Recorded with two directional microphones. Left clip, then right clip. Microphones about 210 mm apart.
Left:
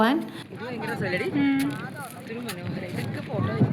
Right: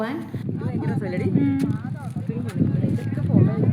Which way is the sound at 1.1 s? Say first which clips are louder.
Left 2 dB; 45° right (ahead or behind).